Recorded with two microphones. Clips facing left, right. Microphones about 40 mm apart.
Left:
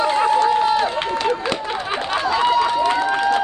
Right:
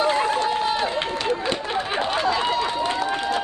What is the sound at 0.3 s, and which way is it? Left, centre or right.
Run, left.